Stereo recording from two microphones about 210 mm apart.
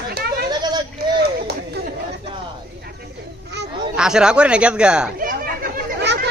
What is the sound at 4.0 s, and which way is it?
Speech, 5° right (ahead or behind).